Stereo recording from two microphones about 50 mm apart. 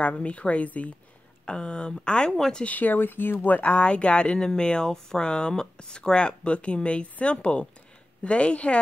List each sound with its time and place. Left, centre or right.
0.0 s speech: left
1.4 s speech: centre
2.6 s speech: left
3.7 s speech: left